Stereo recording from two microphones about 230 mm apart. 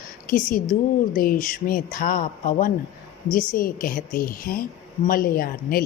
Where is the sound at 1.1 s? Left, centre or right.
Left.